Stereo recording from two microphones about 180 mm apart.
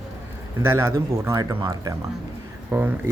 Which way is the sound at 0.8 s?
15° right (ahead or behind).